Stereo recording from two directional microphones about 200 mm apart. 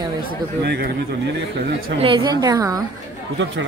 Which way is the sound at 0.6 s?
55° right (ahead or behind).